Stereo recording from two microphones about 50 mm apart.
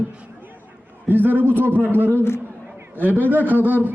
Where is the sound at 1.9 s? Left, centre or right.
Right.